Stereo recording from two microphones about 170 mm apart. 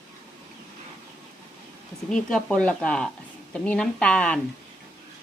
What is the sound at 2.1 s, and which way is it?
A woman's voice, 5° left (ahead or behind).